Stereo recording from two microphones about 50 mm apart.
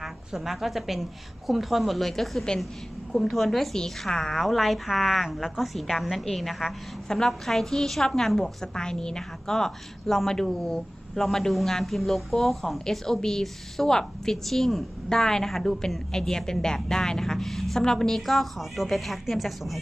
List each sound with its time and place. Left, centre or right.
0.0 s a woman's voice: centre